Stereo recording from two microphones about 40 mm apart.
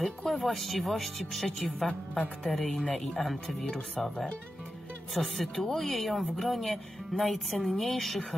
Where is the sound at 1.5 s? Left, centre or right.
Centre.